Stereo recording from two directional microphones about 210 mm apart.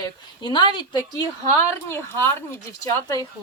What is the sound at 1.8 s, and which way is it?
Speech, 10° left (ahead or behind).